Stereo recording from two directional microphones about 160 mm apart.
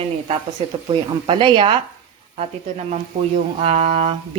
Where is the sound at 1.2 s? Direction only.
30° right (ahead or behind).